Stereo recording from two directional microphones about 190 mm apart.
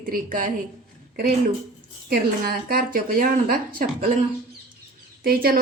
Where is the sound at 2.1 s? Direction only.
50° right (ahead or behind).